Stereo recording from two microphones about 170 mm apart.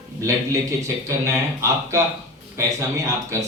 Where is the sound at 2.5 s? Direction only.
20° right (ahead or behind).